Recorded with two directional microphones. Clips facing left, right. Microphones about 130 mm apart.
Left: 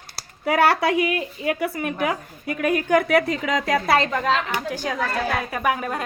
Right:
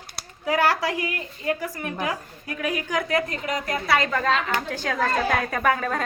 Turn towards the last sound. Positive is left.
turn(degrees=10)  # may be behind; listen again after turning